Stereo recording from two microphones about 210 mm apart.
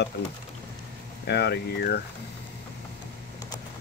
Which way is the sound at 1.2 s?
50° left (ahead or behind).